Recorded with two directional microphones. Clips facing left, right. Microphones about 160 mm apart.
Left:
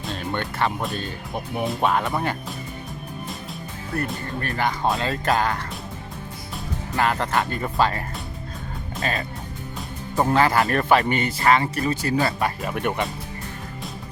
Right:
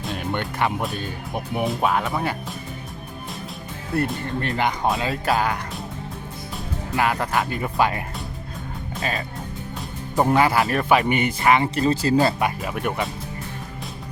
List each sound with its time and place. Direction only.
0.0 s music: centre (ahead or behind)
0.6 s speech: 15° right (ahead or behind)
4.4 s speech: 20° right (ahead or behind)
4.9 s speech: 5° right (ahead or behind); by 12.5 s 25° right (ahead or behind)
12.6 s speech: centre (ahead or behind)